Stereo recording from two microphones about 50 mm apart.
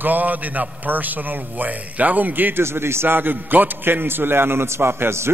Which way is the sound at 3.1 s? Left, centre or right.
Right.